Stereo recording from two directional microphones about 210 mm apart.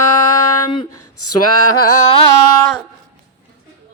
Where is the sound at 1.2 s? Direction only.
90° left.